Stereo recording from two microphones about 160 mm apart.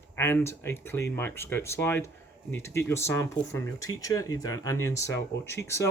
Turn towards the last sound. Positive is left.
turn(degrees=15)  # may be behind; listen again after turning